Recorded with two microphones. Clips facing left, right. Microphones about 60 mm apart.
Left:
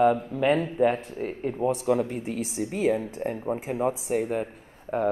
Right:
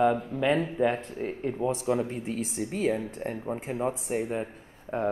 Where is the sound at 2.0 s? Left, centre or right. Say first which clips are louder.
Left 2 dB; left.